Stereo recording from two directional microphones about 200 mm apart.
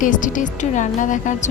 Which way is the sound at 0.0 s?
40° left (ahead or behind).